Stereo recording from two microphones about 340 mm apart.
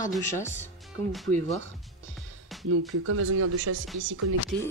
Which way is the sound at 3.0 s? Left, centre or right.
Right.